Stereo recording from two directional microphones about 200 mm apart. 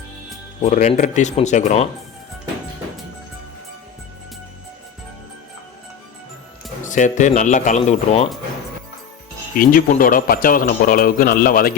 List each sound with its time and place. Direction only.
0.6 s speech: 35° left (ahead or behind)
6.8 s speech: 40° left (ahead or behind)
9.6 s a man's voice: 45° left (ahead or behind)